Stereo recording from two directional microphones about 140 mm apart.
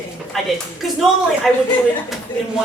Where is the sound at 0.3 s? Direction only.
Centre (ahead or behind).